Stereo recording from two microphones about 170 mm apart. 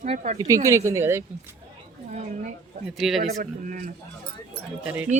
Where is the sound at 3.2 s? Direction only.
40° right (ahead or behind).